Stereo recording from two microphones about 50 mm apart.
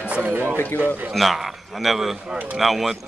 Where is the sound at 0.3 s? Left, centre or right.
Right.